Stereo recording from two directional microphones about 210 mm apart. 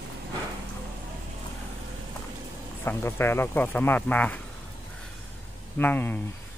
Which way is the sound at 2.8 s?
10° left (ahead or behind).